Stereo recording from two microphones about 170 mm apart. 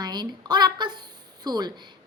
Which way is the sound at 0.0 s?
25° right (ahead or behind).